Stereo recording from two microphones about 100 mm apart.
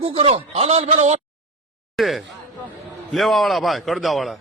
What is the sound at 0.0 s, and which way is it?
A man's voice, 70° right (ahead or behind).